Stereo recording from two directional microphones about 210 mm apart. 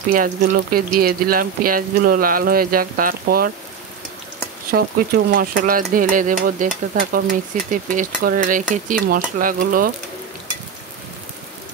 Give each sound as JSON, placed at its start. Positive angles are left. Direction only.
{"t": 0.1, "sound": "speech", "side_deg": -40}
{"t": 4.6, "sound": "speech", "side_deg": -45}